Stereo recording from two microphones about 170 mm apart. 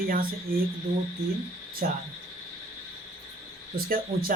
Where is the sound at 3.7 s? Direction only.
60° right (ahead or behind).